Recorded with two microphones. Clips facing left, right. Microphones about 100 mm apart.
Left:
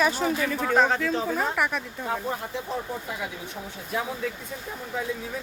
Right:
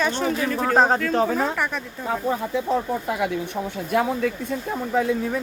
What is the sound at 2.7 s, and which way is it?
Speech, 70° right (ahead or behind).